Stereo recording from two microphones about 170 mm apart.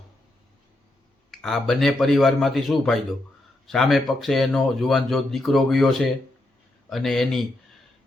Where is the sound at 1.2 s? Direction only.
Centre (ahead or behind).